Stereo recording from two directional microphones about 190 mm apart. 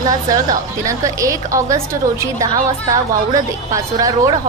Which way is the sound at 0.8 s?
15° right (ahead or behind).